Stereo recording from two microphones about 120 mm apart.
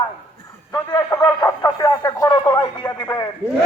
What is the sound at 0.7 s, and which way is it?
Speech, 35° left (ahead or behind).